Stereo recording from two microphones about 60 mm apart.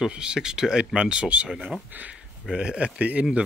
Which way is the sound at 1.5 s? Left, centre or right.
Centre.